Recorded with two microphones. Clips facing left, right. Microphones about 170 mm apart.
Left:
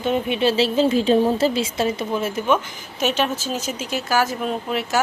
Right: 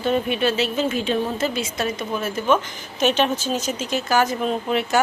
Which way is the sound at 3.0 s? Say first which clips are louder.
Right 2 dB; 5° left (ahead or behind).